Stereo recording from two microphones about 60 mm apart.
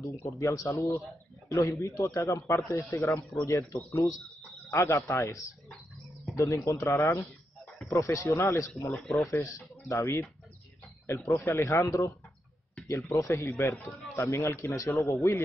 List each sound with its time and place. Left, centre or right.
0.2 s a man's voice: left
8.9 s speech: centre
9.3 s a man's voice: left